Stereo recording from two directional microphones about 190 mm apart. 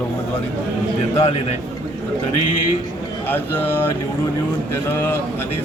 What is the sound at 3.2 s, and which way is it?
Speech, 10° left (ahead or behind).